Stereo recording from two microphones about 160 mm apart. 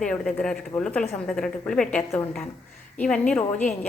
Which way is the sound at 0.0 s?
5° left (ahead or behind).